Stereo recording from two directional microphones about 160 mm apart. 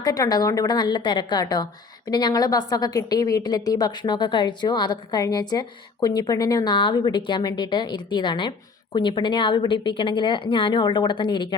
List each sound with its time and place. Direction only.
0.0 s a woman's voice: 25° left (ahead or behind)